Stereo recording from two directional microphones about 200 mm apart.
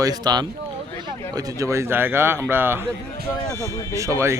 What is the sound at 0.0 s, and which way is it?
Speech, 20° right (ahead or behind).